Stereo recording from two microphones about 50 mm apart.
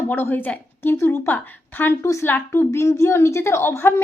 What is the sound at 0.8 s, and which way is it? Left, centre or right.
Speech, left.